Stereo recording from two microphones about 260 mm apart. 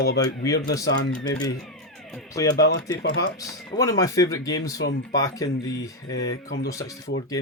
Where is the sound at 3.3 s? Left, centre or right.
Centre.